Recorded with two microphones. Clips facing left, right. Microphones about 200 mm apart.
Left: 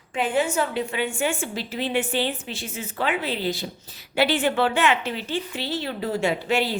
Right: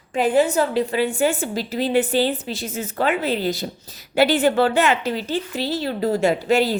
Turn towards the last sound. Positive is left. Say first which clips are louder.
# right 5 dB
turn(degrees=-40)  # may be behind; listen again after turning